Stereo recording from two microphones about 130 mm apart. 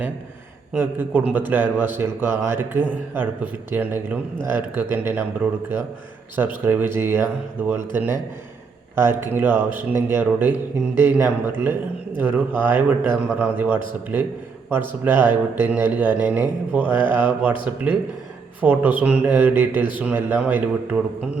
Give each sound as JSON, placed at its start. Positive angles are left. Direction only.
{"t": 0.7, "sound": "speech", "side_deg": -15}